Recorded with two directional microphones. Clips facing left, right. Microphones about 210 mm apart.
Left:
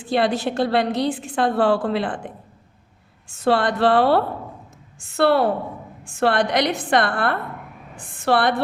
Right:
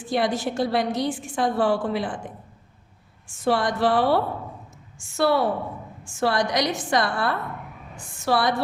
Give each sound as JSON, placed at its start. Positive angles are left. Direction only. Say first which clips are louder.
{"t": 0.0, "sound": "a woman's voice", "louder": "left 3 dB", "side_deg": 65}
{"t": 3.3, "sound": "a woman's voice", "louder": "left 3 dB", "side_deg": 65}